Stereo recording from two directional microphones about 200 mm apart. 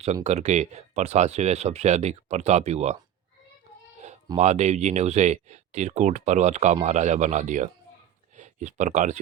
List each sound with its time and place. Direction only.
0.0 s speech: 30° right (ahead or behind)
4.4 s speech: 35° right (ahead or behind)